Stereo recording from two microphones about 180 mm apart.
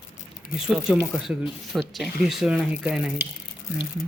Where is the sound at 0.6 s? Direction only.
5° right (ahead or behind).